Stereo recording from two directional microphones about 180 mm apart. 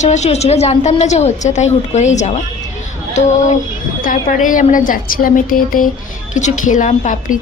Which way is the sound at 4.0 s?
50° left (ahead or behind).